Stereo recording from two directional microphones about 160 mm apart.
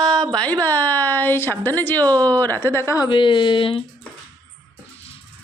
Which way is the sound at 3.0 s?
30° left (ahead or behind).